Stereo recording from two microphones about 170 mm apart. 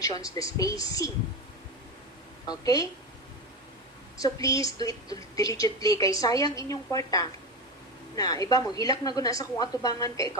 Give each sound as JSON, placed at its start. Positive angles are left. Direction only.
{"t": 0.0, "sound": "a woman's voice", "side_deg": 20}
{"t": 2.5, "sound": "a woman's voice", "side_deg": 20}
{"t": 4.2, "sound": "a woman's voice", "side_deg": 20}